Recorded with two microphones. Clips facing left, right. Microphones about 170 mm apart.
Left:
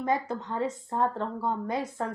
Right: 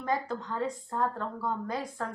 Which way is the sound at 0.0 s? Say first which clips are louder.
Left 3 dB; 25° left (ahead or behind).